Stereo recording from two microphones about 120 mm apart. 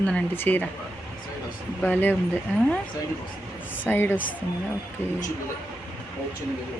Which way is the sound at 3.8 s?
20° left (ahead or behind).